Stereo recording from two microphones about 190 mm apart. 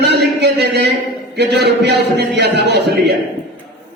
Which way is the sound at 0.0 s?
65° right (ahead or behind).